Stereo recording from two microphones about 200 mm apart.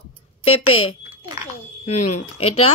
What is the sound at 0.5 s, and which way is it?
Speech, 90° left.